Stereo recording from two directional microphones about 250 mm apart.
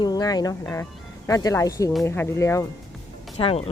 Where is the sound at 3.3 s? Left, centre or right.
Left.